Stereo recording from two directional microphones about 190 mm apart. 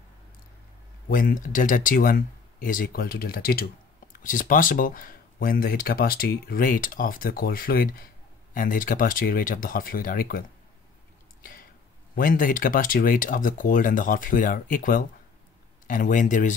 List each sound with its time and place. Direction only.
1.0 s speech: 45° left (ahead or behind)
12.2 s speech: 45° left (ahead or behind)